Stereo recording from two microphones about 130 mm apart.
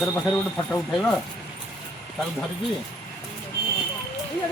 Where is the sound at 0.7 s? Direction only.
10° left (ahead or behind).